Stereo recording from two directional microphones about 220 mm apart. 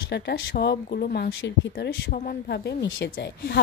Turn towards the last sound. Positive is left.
turn(degrees=50)  # may be behind; listen again after turning